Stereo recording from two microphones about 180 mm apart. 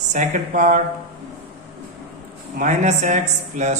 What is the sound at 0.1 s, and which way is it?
Speech, 45° right (ahead or behind).